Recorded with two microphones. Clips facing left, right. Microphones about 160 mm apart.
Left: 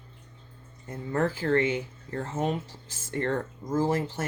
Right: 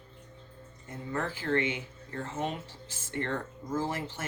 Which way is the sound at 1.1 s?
40° left (ahead or behind).